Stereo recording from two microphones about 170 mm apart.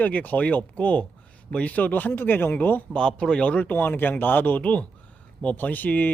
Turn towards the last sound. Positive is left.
turn(degrees=10)  # may be behind; listen again after turning